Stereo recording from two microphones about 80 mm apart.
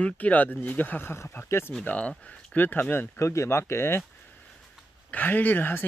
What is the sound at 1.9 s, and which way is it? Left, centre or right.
Speech, centre.